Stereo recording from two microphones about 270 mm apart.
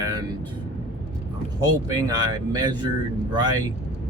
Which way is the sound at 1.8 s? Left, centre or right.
Centre.